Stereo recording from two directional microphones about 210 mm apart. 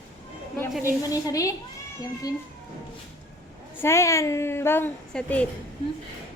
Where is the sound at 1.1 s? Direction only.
15° left (ahead or behind).